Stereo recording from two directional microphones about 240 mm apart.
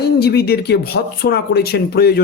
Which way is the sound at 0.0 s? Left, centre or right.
Left.